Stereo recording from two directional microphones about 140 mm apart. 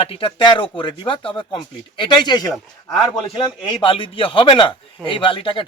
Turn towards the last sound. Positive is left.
turn(degrees=35)  # may be behind; listen again after turning